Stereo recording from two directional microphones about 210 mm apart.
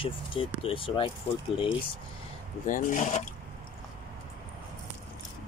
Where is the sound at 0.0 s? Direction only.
25° left (ahead or behind).